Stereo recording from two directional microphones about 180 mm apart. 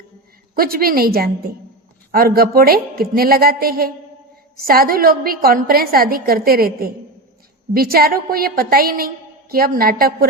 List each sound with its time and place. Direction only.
0.5 s a woman's voice: 55° right (ahead or behind)